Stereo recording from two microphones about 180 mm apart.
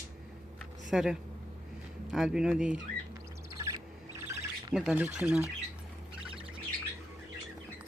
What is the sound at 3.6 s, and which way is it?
Bird, 15° right (ahead or behind).